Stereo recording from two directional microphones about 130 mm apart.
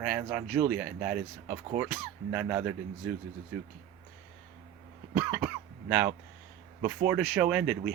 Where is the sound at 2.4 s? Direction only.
10° right (ahead or behind).